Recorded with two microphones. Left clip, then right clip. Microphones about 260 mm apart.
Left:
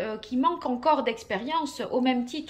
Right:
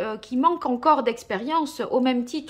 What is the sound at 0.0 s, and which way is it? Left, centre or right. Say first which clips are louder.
Speech: right 4 dB; centre.